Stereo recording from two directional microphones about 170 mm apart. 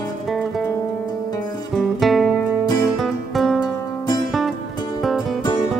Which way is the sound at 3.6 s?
25° left (ahead or behind).